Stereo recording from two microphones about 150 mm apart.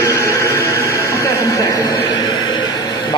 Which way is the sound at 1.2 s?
25° left (ahead or behind).